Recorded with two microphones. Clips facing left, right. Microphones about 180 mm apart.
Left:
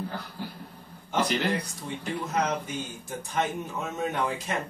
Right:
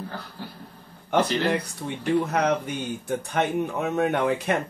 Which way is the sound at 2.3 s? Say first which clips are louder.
Right 4 dB; 60° right (ahead or behind).